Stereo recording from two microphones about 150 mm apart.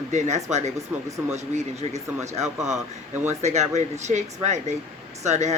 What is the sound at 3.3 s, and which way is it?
Speech, 50° right (ahead or behind).